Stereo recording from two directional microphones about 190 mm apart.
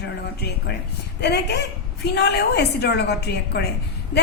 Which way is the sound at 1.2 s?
60° left (ahead or behind).